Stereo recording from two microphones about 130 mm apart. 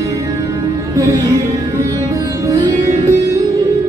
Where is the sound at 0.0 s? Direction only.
25° right (ahead or behind).